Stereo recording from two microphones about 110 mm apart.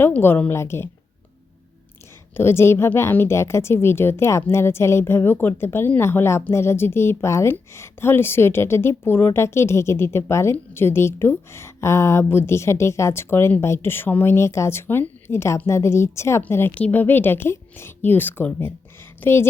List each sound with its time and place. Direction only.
0.0 s a woman's voice: 20° left (ahead or behind)
2.3 s a woman's voice: 20° left (ahead or behind)